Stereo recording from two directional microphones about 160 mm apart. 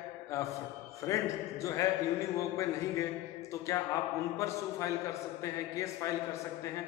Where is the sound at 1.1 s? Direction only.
20° left (ahead or behind).